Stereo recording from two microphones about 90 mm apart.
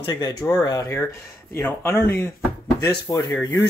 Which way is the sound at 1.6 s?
25° left (ahead or behind).